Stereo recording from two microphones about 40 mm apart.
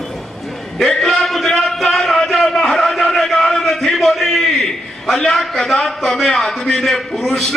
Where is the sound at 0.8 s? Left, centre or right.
Centre.